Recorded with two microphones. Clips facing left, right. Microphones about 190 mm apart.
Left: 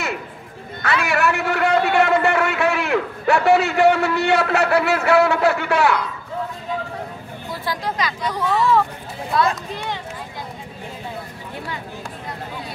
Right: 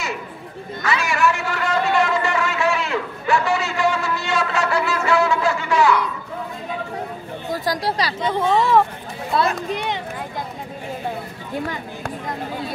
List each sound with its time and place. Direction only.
0.8 s a man's voice: 60° left (ahead or behind)
7.4 s speech: 40° right (ahead or behind)
8.2 s speech: 25° right (ahead or behind)